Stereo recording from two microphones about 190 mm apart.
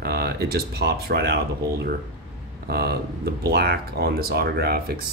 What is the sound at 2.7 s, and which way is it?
Speech, 55° right (ahead or behind).